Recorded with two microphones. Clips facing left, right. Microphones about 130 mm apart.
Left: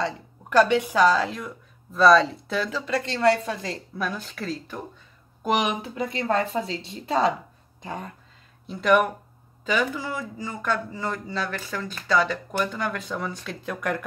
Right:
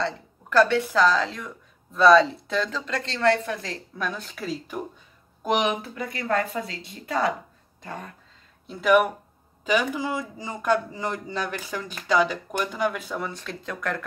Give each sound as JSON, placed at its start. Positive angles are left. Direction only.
{"t": 0.0, "sound": "speech", "side_deg": 15}
{"t": 4.0, "sound": "speech", "side_deg": 0}
{"t": 5.8, "sound": "speech", "side_deg": 25}
{"t": 8.6, "sound": "speech", "side_deg": -5}
{"t": 9.7, "sound": "speech", "side_deg": -15}